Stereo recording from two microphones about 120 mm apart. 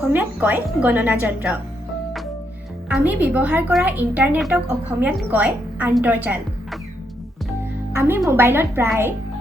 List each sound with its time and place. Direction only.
0.1 s speech: 15° right (ahead or behind)
3.0 s speech: 15° right (ahead or behind)
4.4 s a woman's voice: 5° right (ahead or behind)
4.9 s speech: 15° right (ahead or behind)
7.9 s a woman's voice: 20° right (ahead or behind)